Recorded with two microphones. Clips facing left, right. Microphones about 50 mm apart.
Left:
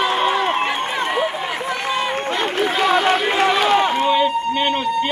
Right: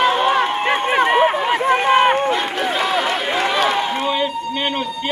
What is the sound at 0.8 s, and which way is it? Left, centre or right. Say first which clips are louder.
Run: right 6 dB; right.